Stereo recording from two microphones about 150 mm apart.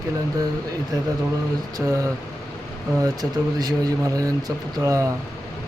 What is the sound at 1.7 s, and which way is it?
Speech, 20° right (ahead or behind).